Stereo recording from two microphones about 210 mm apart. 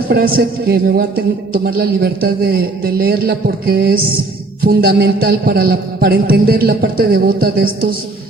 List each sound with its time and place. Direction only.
0.1 s a man's voice: 45° right (ahead or behind)